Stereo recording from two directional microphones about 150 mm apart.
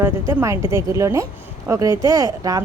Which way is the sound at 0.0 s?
15° right (ahead or behind).